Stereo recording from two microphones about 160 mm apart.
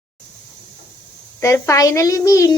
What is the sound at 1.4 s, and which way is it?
A woman's voice, 20° left (ahead or behind).